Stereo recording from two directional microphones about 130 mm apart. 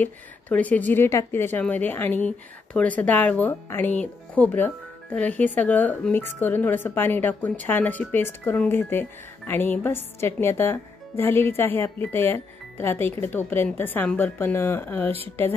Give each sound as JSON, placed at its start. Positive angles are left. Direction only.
{"t": 0.0, "sound": "speech", "side_deg": 10}